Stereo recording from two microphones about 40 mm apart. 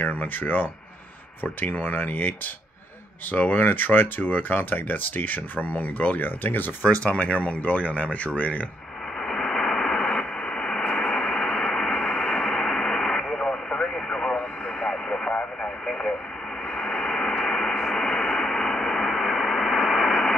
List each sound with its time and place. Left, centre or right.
0.0 s speech: left
7.0 s speech: left
9.2 s radio: left
10.0 s radio: left
14.3 s vehicle: left
16.7 s radio: centre